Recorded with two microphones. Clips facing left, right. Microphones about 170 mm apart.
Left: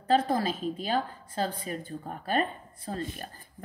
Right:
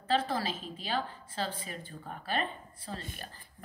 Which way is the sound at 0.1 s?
45° left (ahead or behind).